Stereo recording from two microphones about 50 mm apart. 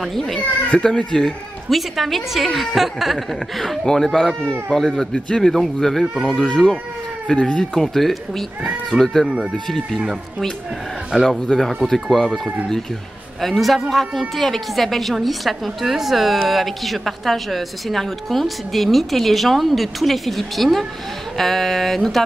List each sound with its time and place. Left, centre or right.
0.9 s speech: centre
1.7 s a woman's voice: centre
6.4 s speech: centre
7.7 s a woman's voice: centre
11.2 s a woman's voice: centre
13.4 s a woman's voice: centre